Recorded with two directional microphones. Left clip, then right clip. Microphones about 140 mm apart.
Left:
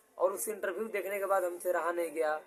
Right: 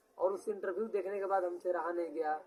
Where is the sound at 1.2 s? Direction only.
45° left (ahead or behind).